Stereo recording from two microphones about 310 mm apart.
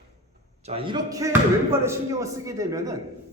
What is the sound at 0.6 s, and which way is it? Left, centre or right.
A man's voice, centre.